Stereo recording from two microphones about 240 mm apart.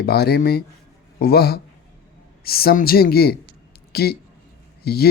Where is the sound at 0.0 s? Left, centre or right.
Left.